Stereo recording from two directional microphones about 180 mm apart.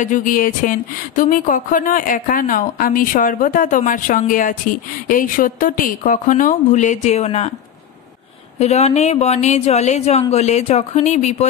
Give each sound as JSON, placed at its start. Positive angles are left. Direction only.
{"t": 0.0, "sound": "speech", "side_deg": 45}
{"t": 8.5, "sound": "speech", "side_deg": 35}